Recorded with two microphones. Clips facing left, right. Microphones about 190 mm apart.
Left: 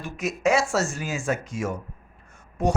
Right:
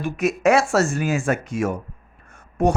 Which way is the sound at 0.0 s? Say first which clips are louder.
Right 6 dB; 60° right (ahead or behind).